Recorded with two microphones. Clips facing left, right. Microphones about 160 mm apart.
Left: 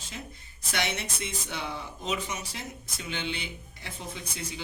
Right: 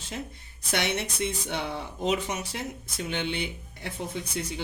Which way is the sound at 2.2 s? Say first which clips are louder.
Right 4 dB; 60° right (ahead or behind).